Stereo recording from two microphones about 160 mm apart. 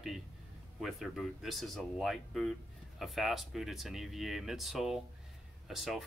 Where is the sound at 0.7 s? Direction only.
Centre (ahead or behind).